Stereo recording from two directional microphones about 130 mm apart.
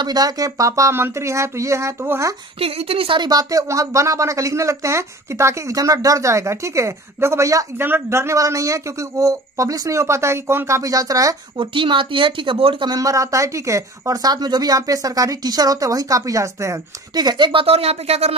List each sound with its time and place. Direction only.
0.0 s a woman's voice: 30° right (ahead or behind)
2.6 s a woman's voice: 50° right (ahead or behind)
3.2 s a woman's voice: 30° right (ahead or behind)
11.5 s speech: 40° right (ahead or behind)
12.9 s a woman's voice: 25° right (ahead or behind); by 18.3 s 55° right (ahead or behind)